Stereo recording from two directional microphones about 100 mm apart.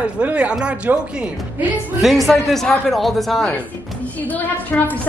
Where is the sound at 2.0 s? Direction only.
Centre (ahead or behind).